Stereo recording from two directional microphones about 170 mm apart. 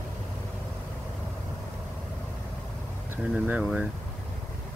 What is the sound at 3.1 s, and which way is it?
Speech, 10° right (ahead or behind).